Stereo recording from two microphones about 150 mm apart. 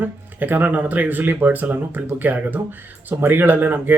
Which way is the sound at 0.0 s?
10° right (ahead or behind).